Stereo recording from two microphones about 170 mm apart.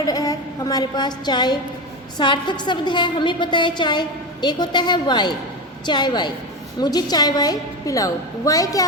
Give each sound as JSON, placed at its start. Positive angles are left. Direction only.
{"t": 0.0, "sound": "a woman's voice", "side_deg": 20}